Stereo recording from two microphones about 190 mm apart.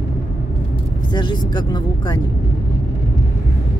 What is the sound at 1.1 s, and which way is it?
Speech, 25° left (ahead or behind).